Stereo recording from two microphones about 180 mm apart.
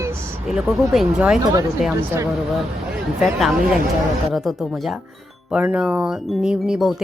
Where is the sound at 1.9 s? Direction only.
15° right (ahead or behind).